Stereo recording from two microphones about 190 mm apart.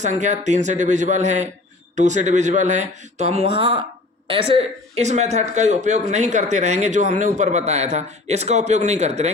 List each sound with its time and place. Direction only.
0.0 s speech: 40° right (ahead or behind)